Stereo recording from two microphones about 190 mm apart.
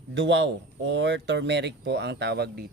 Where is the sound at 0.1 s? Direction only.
75° right (ahead or behind).